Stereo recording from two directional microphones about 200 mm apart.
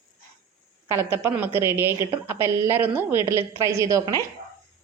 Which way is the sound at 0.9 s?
10° right (ahead or behind).